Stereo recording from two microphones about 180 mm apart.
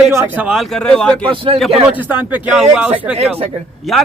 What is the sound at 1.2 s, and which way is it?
Speech, 30° right (ahead or behind).